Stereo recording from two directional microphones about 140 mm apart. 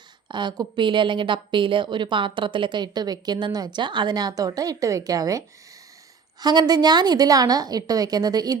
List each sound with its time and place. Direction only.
0.3 s a woman's voice: 30° right (ahead or behind)
6.4 s a woman's voice: 30° right (ahead or behind)